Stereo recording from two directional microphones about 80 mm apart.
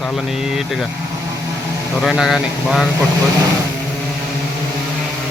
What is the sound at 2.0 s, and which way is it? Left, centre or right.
Speech, centre.